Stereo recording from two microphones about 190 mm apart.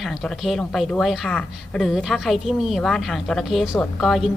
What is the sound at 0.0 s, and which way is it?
Speech, centre (ahead or behind).